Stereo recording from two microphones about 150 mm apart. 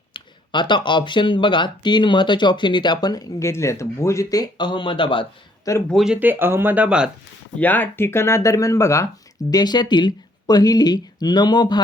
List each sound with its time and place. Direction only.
0.1 s speech: 30° left (ahead or behind)
5.9 s speech: 5° right (ahead or behind)
7.6 s speech: 10° left (ahead or behind); by 11.8 s 30° left (ahead or behind)